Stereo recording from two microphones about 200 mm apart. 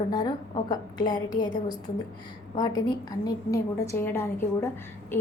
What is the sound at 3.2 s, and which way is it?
A woman's voice, 15° left (ahead or behind).